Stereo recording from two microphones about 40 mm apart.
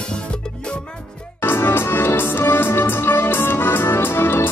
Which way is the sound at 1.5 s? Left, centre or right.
Left.